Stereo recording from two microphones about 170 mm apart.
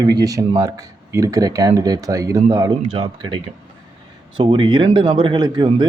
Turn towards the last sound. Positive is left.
turn(degrees=-25)  # may be behind; listen again after turning